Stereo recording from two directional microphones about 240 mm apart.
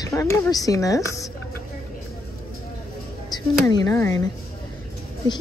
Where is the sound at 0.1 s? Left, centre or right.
Centre.